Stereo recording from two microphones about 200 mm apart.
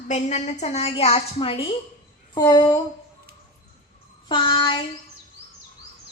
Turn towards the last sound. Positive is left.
turn(degrees=25)  # may be behind; listen again after turning